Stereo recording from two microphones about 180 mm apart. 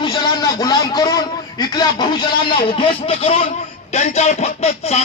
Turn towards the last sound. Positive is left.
turn(degrees=35)  # may be behind; listen again after turning